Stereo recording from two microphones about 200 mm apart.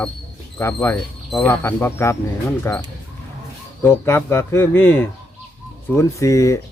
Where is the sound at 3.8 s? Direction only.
10° left (ahead or behind).